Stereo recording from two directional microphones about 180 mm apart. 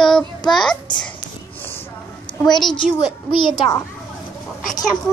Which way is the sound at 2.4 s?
Centre (ahead or behind).